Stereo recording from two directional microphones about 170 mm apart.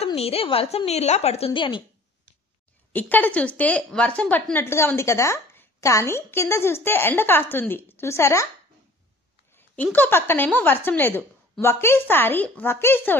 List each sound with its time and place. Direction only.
0.0 s a woman's voice: 35° left (ahead or behind)
2.9 s a woman's voice: 10° left (ahead or behind)
9.9 s a woman's voice: 10° left (ahead or behind)